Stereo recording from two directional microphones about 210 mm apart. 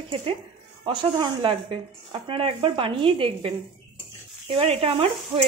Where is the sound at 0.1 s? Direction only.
25° right (ahead or behind).